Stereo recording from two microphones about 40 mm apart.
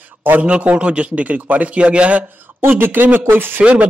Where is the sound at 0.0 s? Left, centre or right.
Right.